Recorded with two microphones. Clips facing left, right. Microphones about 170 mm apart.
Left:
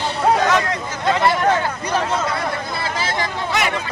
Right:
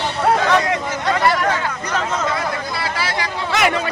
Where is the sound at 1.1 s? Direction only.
25° left (ahead or behind).